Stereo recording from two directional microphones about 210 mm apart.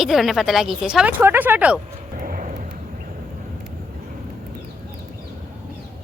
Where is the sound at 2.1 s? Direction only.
40° right (ahead or behind).